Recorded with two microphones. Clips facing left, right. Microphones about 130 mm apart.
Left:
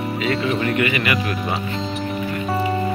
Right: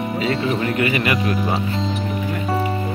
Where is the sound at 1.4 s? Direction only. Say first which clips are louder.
Right 3 dB; centre (ahead or behind).